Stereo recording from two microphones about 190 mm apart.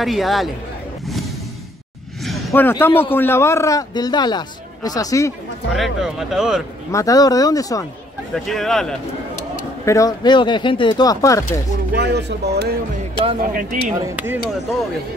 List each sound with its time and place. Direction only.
0.0 s speech: centre (ahead or behind)
2.2 s a sound: 5° left (ahead or behind)
3.0 s a man's voice: 10° left (ahead or behind)
5.7 s speech: centre (ahead or behind)
6.9 s speech: 15° left (ahead or behind)
8.5 s speech: centre (ahead or behind)
9.4 s speech: 15° left (ahead or behind)
11.9 s speech: 60° right (ahead or behind)
13.1 s speech: 30° right (ahead or behind)
13.5 s speech: 45° right (ahead or behind)
14.0 s speech: 10° right (ahead or behind)